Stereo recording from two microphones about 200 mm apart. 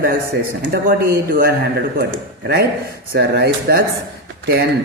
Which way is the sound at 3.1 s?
55° right (ahead or behind).